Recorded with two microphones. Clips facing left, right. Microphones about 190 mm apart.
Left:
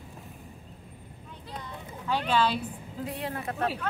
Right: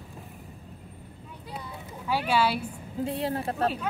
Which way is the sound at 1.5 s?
10° right (ahead or behind).